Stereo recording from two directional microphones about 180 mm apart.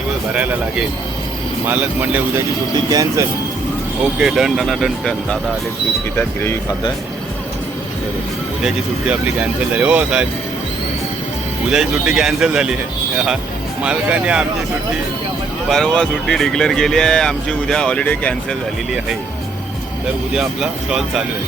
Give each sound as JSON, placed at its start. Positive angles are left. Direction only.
{"t": 1.6, "sound": "speech", "side_deg": -10}
{"t": 4.2, "sound": "speech", "side_deg": 0}
{"t": 8.6, "sound": "speech", "side_deg": -5}
{"t": 11.7, "sound": "speech", "side_deg": -5}
{"t": 13.8, "sound": "speech", "side_deg": -5}
{"t": 15.7, "sound": "speech", "side_deg": 5}
{"t": 20.3, "sound": "speech", "side_deg": 0}